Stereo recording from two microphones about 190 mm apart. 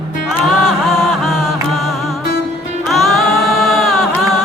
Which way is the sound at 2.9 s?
Centre (ahead or behind).